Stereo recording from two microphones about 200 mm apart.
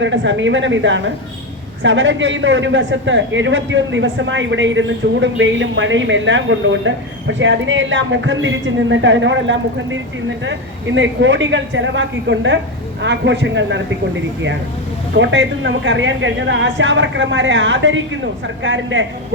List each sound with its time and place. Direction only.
0.0 s a woman's voice: 65° right (ahead or behind)
15.2 s a woman's voice: 65° right (ahead or behind)